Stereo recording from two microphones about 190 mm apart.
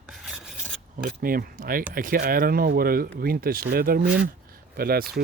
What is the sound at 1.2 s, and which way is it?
Speech, 50° right (ahead or behind).